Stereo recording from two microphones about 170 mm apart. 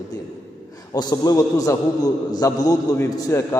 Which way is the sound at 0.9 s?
20° left (ahead or behind).